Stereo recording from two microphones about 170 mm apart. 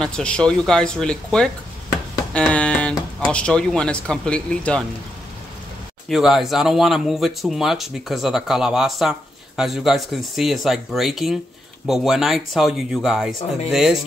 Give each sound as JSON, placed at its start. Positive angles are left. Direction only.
{"t": 0.0, "sound": "speech", "side_deg": 5}
{"t": 6.0, "sound": "speech", "side_deg": 0}